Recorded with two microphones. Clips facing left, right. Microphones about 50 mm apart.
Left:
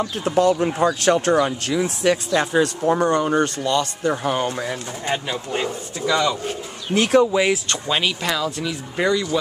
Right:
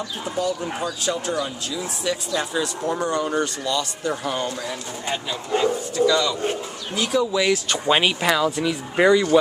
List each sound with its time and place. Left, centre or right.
0.2 s speech: left
6.9 s speech: left
7.2 s speech: left
7.8 s speech: centre